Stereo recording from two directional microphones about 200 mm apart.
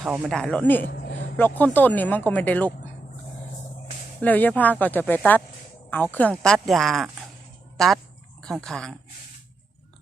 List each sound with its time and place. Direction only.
0.0 s speech: centre (ahead or behind)
0.9 s a sound: 65° left (ahead or behind)
1.4 s speech: 10° left (ahead or behind)
4.2 s speech: 10° left (ahead or behind)
8.4 s speech: centre (ahead or behind)